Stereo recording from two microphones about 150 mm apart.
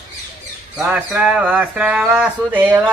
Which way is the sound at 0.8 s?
10° right (ahead or behind).